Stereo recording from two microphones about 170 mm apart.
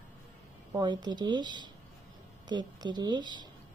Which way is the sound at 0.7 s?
25° right (ahead or behind).